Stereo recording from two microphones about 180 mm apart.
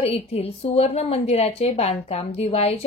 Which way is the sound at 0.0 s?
35° left (ahead or behind).